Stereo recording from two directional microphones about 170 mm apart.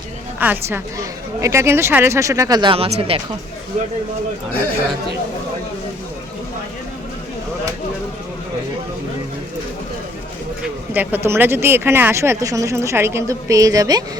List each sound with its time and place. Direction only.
0.3 s speech: 10° right (ahead or behind); by 3.2 s 35° right (ahead or behind)
10.6 s speech: 10° right (ahead or behind)